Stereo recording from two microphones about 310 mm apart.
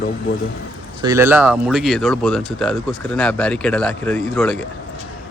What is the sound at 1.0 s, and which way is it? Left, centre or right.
Speech, centre.